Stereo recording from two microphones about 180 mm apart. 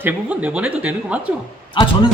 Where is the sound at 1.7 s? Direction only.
25° left (ahead or behind).